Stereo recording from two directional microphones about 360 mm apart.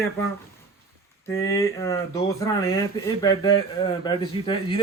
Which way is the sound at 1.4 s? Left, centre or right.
Centre.